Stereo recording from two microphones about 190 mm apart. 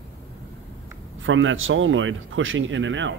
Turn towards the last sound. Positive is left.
turn(degrees=-80)